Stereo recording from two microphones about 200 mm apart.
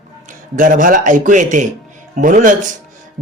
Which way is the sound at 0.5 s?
40° right (ahead or behind).